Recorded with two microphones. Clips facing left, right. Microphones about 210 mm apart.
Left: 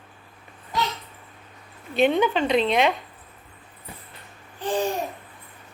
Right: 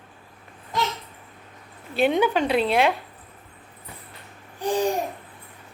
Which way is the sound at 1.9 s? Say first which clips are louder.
Even; 5° right (ahead or behind).